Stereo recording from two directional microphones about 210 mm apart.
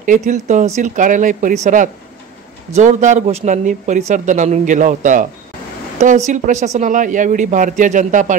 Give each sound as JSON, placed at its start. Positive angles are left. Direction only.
{"t": 0.0, "sound": "speech", "side_deg": -35}